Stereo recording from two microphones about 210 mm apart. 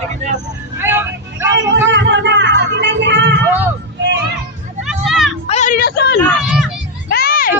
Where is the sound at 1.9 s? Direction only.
60° right (ahead or behind).